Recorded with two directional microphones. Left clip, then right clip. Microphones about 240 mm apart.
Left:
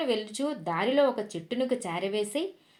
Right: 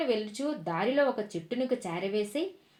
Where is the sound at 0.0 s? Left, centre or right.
Left.